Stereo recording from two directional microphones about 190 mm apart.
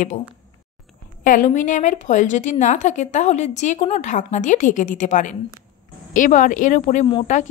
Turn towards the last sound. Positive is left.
turn(degrees=35)  # may be behind; listen again after turning